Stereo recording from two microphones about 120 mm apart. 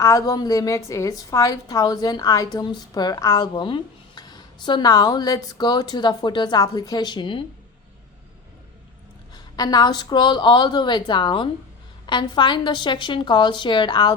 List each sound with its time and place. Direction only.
0.0 s a woman's voice: 25° left (ahead or behind)
9.3 s a woman's voice: 35° left (ahead or behind)